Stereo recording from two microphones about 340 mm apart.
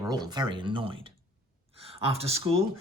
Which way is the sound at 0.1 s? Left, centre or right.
Centre.